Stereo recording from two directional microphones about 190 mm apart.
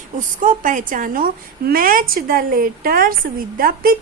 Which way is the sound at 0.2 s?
45° right (ahead or behind).